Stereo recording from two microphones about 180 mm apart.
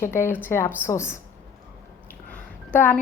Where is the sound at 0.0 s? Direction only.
15° left (ahead or behind).